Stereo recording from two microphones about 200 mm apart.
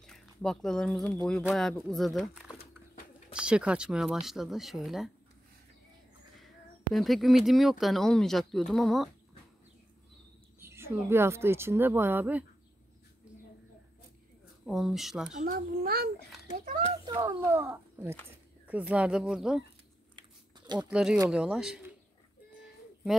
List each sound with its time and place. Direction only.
0.0 s speech: 5° left (ahead or behind)
6.9 s speech: centre (ahead or behind)
10.6 s a woman's voice: 10° right (ahead or behind)
14.7 s speech: centre (ahead or behind)
15.3 s a child's voice: 45° right (ahead or behind)
17.0 s a child's voice: 20° right (ahead or behind)
17.4 s a woman's voice: 10° right (ahead or behind)
20.2 s chewing: 20° right (ahead or behind)
20.9 s speech: 5° right (ahead or behind)